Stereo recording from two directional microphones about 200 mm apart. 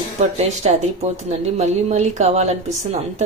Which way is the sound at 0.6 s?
30° right (ahead or behind).